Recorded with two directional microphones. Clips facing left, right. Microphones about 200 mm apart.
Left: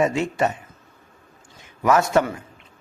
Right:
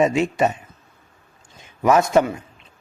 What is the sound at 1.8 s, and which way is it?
Speech, 20° right (ahead or behind).